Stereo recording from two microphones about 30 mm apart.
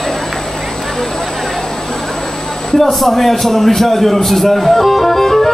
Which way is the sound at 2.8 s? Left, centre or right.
Centre.